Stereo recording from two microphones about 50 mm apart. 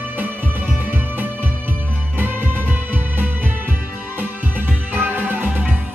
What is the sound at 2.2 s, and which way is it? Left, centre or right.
Music, right.